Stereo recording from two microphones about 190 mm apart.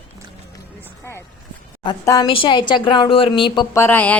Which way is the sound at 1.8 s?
20° left (ahead or behind).